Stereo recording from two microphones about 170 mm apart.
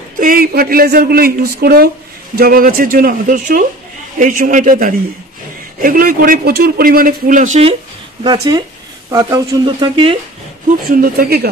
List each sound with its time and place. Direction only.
0.2 s a man's voice: 60° right (ahead or behind)
8.2 s speech: 25° right (ahead or behind)
10.9 s a man's voice: 60° right (ahead or behind)